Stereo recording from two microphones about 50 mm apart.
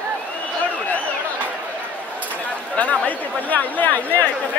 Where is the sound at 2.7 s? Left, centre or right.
Left.